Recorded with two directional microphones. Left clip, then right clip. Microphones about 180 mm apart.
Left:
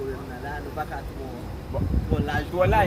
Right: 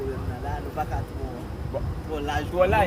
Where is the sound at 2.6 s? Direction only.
10° right (ahead or behind).